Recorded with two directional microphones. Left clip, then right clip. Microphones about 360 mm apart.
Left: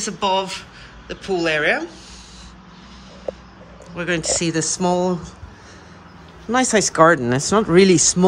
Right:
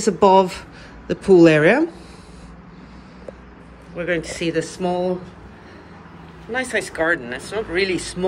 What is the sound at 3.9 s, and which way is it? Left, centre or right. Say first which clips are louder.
Speech: left 2 dB; centre.